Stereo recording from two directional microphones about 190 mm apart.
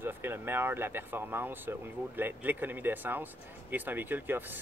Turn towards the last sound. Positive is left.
turn(degrees=-10)  # may be behind; listen again after turning